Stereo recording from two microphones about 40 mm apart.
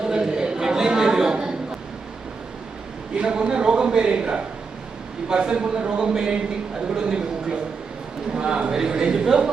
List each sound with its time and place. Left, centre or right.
0.0 s a sound: centre
3.2 s speech: right
8.3 s speech: right